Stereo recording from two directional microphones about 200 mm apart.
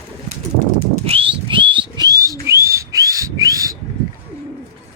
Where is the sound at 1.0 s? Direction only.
25° right (ahead or behind).